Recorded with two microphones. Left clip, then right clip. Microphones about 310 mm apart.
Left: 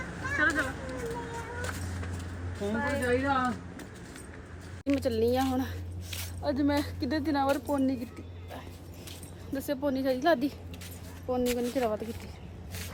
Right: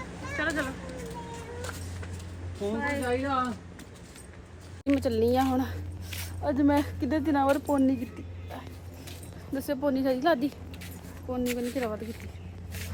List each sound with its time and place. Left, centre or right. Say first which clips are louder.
0.0 s a sound: left 4 dB; centre
4.9 s speech: right 2 dB; centre
9.6 s a woman's voice: right 2 dB; centre